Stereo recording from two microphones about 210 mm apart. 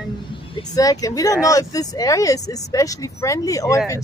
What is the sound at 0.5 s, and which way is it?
Speech, 15° left (ahead or behind).